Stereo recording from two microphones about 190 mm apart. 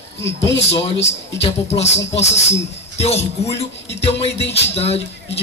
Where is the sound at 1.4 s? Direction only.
35° left (ahead or behind).